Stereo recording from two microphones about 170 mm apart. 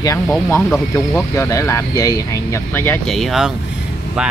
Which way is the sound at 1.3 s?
15° left (ahead or behind).